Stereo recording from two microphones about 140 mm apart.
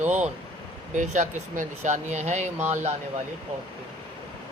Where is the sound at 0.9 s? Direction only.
60° right (ahead or behind).